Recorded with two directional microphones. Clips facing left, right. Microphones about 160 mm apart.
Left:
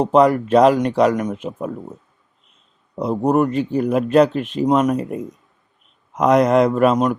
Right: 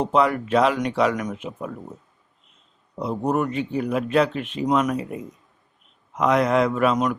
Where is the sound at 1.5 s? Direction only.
45° left (ahead or behind).